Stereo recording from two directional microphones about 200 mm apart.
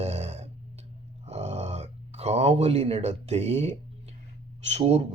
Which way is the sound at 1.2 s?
35° right (ahead or behind).